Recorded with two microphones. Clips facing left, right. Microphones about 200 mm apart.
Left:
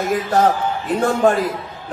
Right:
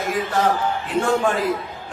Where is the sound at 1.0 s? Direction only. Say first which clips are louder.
Left 4 dB; 40° left (ahead or behind).